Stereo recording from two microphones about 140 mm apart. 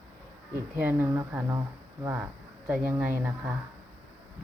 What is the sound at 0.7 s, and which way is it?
A woman's voice, 15° right (ahead or behind).